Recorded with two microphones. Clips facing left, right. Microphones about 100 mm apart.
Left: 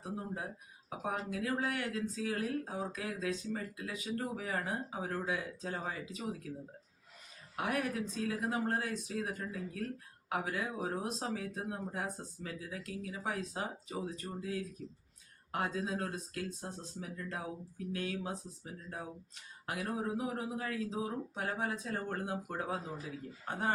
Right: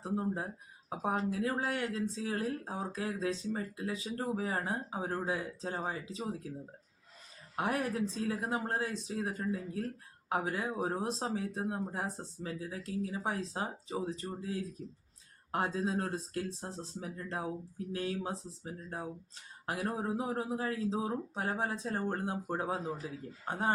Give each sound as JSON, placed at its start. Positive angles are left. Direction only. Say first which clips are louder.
{"t": 0.0, "sound": "speech", "louder": "right 6 dB", "side_deg": -30}
{"t": 7.5, "sound": "speech", "louder": "right 2 dB", "side_deg": -30}